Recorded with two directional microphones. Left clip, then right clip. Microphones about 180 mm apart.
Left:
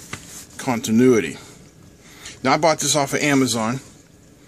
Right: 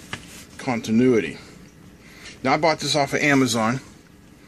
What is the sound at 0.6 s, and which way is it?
A man's voice, 25° left (ahead or behind).